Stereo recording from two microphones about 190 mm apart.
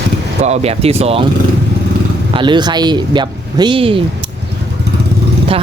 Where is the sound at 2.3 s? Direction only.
25° right (ahead or behind).